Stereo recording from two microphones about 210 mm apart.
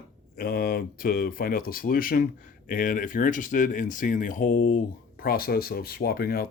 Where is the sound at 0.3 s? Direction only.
45° left (ahead or behind).